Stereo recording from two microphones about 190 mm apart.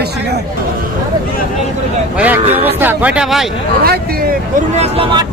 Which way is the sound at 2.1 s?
5° right (ahead or behind).